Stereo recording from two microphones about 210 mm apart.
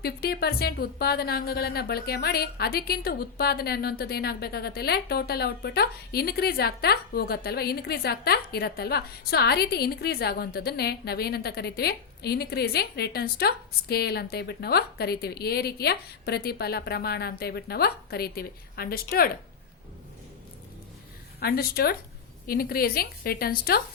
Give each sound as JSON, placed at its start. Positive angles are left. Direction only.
{"t": 0.0, "sound": "a woman's voice", "side_deg": 50}
{"t": 21.4, "sound": "a woman's voice", "side_deg": 45}